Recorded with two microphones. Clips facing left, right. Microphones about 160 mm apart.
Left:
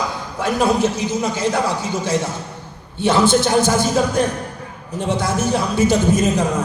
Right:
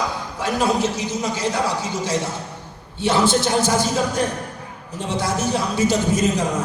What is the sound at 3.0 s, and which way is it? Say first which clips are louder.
A man's voice: left 3 dB; 50° left (ahead or behind).